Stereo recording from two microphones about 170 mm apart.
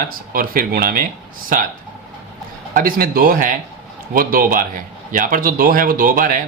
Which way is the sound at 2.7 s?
60° right (ahead or behind).